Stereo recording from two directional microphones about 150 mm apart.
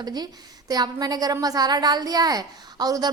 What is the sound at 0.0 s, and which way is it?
A woman's voice, 25° right (ahead or behind).